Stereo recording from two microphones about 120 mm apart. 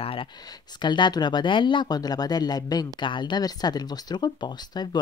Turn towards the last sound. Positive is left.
turn(degrees=35)  # may be behind; listen again after turning